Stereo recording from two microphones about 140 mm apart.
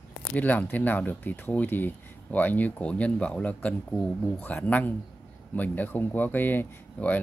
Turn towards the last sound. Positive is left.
turn(degrees=10)  # may be behind; listen again after turning